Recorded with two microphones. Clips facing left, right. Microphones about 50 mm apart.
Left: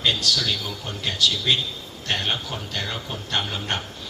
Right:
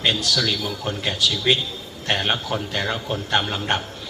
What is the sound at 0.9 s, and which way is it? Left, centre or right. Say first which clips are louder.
Speech: even; right.